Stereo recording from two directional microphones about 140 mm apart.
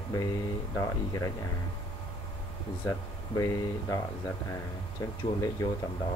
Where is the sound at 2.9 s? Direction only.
25° left (ahead or behind).